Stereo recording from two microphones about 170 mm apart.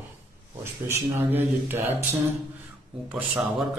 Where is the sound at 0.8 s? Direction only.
15° right (ahead or behind).